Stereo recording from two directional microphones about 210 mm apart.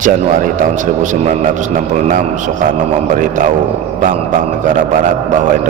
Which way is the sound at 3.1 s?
40° right (ahead or behind).